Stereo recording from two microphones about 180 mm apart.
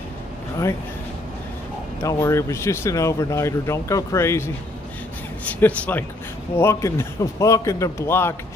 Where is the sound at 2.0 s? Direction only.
15° left (ahead or behind).